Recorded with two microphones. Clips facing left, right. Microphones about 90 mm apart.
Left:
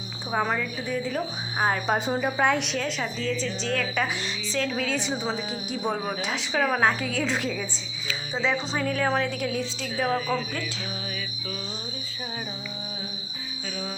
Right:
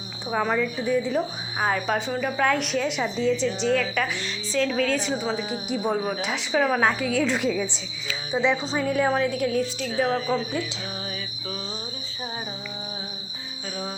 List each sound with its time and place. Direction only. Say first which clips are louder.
0.3 s a woman's voice: right 2 dB; 5° left (ahead or behind); by 2.4 s 20° left (ahead or behind)
2.4 s a woman's voice: right 3 dB; centre (ahead or behind)
2.9 s a woman's voice: right 5 dB; 15° right (ahead or behind)
3.8 s a woman's voice: right 2 dB; 5° left (ahead or behind)
5.6 s a woman's voice: right 3 dB; 10° right (ahead or behind)
8.3 s a woman's voice: right 4 dB; 15° right (ahead or behind)
10.1 s speech: left 2 dB; 30° right (ahead or behind)